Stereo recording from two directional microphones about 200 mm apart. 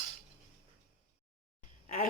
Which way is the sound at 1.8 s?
40° left (ahead or behind).